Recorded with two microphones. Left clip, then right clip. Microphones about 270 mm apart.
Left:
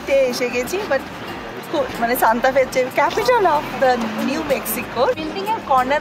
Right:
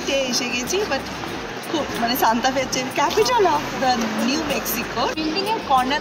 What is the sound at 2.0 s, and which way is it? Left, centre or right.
Speech, centre.